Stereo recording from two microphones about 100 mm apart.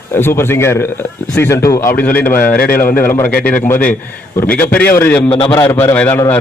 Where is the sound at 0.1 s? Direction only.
25° left (ahead or behind).